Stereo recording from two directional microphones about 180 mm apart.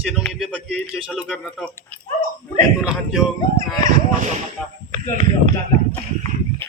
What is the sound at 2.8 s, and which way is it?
Speech, 5° right (ahead or behind).